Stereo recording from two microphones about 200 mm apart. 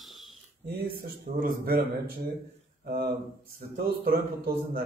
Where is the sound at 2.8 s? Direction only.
50° right (ahead or behind).